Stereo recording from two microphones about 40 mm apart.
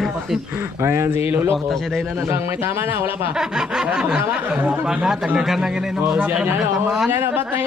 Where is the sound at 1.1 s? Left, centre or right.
Right.